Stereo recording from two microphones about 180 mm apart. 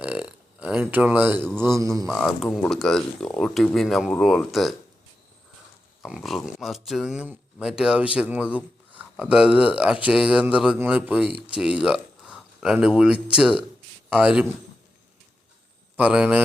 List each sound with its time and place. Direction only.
0.0 s burping: 5° right (ahead or behind)
1.5 s speech: 5° left (ahead or behind)
1.8 s speech: 20° right (ahead or behind)
2.0 s speech: centre (ahead or behind)
6.0 s speech: centre (ahead or behind)
16.0 s speech: 5° right (ahead or behind)